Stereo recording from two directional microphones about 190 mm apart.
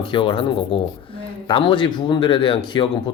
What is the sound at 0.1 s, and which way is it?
Speech, 25° left (ahead or behind).